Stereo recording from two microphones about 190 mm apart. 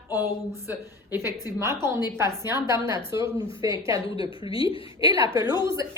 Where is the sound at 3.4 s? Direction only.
20° right (ahead or behind).